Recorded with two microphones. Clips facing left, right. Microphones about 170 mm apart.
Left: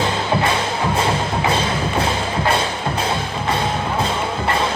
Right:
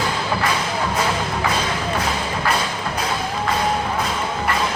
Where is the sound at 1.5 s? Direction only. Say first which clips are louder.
Left 3 dB; 30° left (ahead or behind).